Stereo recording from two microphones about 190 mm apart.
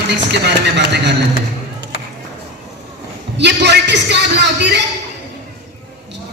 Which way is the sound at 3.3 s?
65° right (ahead or behind).